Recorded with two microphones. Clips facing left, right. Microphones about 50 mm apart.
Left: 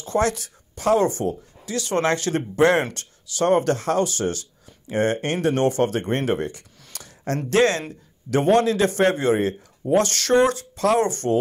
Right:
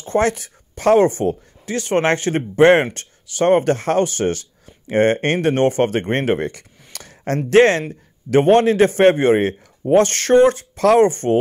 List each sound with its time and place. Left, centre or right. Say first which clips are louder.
0.0 s speech: right 4 dB; right
6.9 s a sound: right 4 dB; right
7.5 s speech: right 7 dB; right